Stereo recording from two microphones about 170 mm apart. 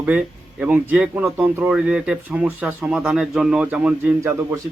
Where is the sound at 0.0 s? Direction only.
10° right (ahead or behind).